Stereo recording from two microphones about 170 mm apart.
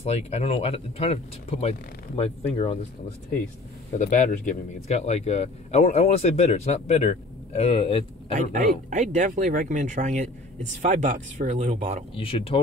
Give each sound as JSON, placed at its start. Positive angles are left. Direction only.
{"t": 0.0, "sound": "a man's voice", "side_deg": 40}
{"t": 4.0, "sound": "a man's voice", "side_deg": 45}
{"t": 8.4, "sound": "speech", "side_deg": -50}
{"t": 12.2, "sound": "a man's voice", "side_deg": 35}